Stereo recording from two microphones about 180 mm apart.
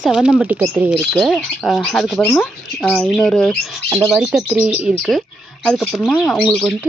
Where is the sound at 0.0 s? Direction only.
5° right (ahead or behind).